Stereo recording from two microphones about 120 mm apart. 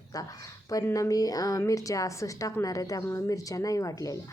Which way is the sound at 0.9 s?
30° left (ahead or behind).